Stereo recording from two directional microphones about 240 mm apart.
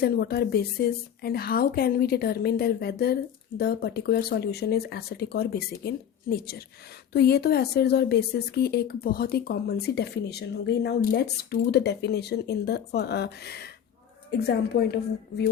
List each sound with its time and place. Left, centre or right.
0.0 s speech: left